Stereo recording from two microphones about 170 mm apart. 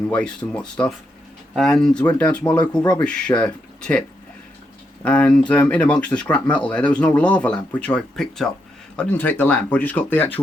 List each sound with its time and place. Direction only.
0.1 s speech: 5° left (ahead or behind)
5.0 s speech: 5° left (ahead or behind)